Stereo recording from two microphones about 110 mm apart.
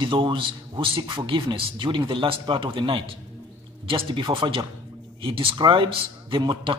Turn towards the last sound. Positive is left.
turn(degrees=-45)  # may be behind; listen again after turning